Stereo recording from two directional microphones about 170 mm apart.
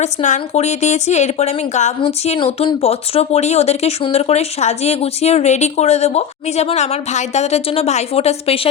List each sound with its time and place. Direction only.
0.0 s speech: 45° left (ahead or behind)